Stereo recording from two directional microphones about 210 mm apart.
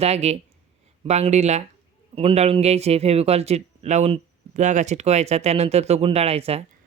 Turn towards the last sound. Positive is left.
turn(degrees=-30)  # may be behind; listen again after turning